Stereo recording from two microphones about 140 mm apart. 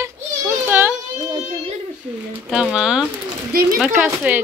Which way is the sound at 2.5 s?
5° right (ahead or behind).